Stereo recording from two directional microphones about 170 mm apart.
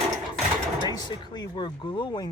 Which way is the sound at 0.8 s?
25° left (ahead or behind).